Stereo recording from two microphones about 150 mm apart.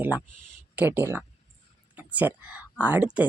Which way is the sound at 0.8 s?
15° right (ahead or behind).